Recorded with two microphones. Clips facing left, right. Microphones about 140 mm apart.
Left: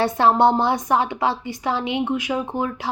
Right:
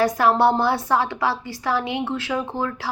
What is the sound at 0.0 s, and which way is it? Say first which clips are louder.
A woman's voice: left 1 dB; 25° left (ahead or behind).